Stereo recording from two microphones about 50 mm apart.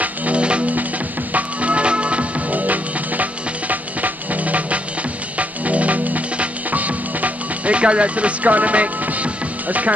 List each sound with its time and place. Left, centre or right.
0.0 s music: right